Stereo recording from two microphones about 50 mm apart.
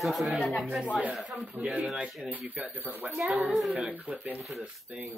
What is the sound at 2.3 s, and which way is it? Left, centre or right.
Speech, right.